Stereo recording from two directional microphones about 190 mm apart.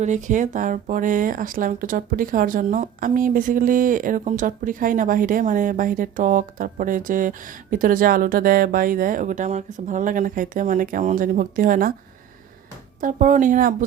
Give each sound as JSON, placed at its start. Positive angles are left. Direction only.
{"t": 0.0, "sound": "speech", "side_deg": -40}
{"t": 13.0, "sound": "speech", "side_deg": -45}